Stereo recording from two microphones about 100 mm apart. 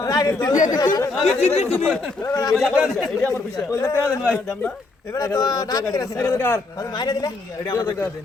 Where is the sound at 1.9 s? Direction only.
5° left (ahead or behind).